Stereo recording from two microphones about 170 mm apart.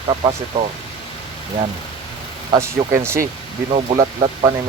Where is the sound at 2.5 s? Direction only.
15° right (ahead or behind).